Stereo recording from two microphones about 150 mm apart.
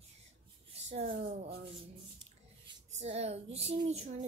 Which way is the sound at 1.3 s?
45° right (ahead or behind).